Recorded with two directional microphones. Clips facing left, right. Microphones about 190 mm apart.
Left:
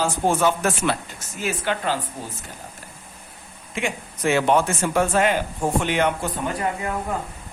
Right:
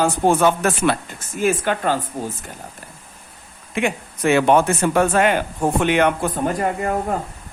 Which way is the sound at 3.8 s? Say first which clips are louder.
Right 5 dB; 60° right (ahead or behind).